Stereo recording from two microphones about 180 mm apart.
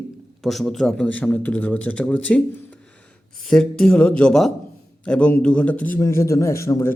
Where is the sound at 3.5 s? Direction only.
5° left (ahead or behind).